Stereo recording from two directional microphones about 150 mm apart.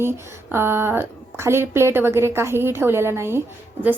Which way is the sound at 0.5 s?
15° right (ahead or behind).